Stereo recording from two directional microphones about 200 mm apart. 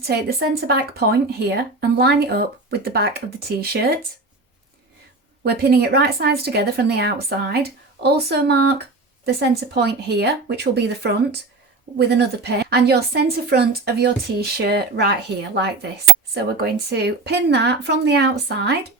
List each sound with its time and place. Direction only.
0.1 s speech: 50° right (ahead or behind)
5.4 s speech: 50° right (ahead or behind)